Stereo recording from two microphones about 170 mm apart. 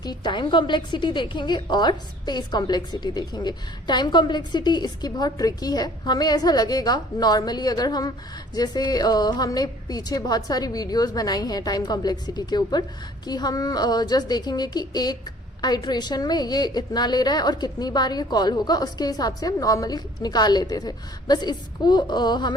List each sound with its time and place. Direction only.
0.0 s a woman's voice: 25° left (ahead or behind)